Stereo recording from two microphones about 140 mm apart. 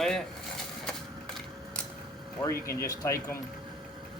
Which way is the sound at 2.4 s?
20° left (ahead or behind).